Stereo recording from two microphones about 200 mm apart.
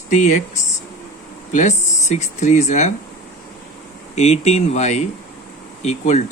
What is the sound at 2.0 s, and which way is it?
Speech, 35° left (ahead or behind).